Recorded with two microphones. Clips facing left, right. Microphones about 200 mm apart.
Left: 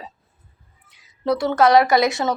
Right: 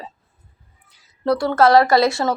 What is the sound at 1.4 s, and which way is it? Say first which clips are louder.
Speech: right 1 dB; 20° left (ahead or behind).